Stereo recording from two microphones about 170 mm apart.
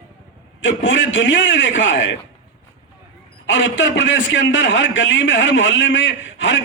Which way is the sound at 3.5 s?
90° left.